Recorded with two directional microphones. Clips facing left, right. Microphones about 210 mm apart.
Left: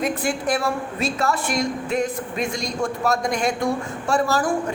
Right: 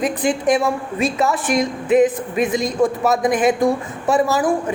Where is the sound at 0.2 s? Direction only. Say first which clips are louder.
Right 6 dB; 20° right (ahead or behind).